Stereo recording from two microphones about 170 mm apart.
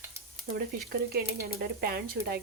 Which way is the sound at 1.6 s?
65° right (ahead or behind).